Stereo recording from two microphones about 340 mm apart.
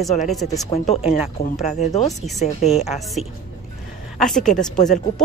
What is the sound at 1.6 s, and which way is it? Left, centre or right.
Speech, centre.